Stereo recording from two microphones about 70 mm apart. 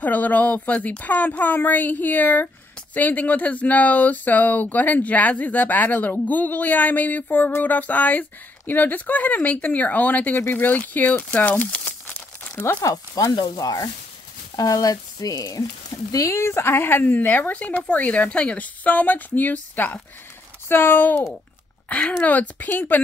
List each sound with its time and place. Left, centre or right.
0.0 s speech: left
13.3 s speech: left
16.3 s speech: left